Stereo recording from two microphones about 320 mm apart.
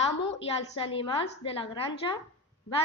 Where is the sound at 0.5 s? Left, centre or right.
Centre.